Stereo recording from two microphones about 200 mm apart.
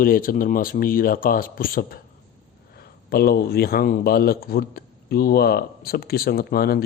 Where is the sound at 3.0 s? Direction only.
50° left (ahead or behind).